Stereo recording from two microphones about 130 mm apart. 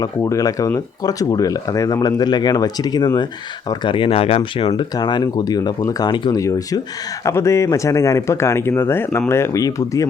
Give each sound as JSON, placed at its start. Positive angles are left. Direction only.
{"t": 0.0, "sound": "speech", "side_deg": 25}